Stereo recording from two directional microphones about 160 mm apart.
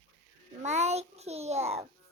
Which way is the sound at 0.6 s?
45° right (ahead or behind).